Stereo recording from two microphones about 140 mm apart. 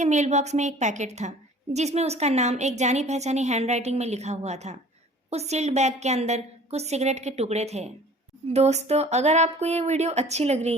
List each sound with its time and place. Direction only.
0.0 s a woman's voice: 60° right (ahead or behind)